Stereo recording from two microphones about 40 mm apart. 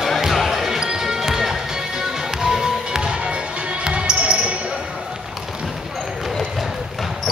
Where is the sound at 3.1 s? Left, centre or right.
Right.